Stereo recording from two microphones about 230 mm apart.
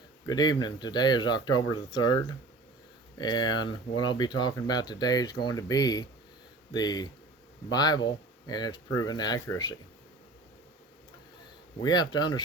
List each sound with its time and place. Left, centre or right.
0.3 s speech: centre
11.8 s speech: centre